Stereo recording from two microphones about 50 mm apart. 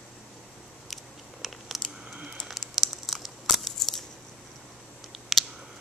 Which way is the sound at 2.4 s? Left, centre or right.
Centre.